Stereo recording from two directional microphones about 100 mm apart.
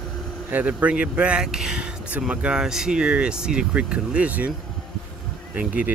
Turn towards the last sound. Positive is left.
turn(degrees=-15)  # may be behind; listen again after turning